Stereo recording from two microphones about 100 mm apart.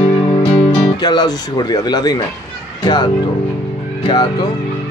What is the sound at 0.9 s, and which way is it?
Speech, 45° left (ahead or behind).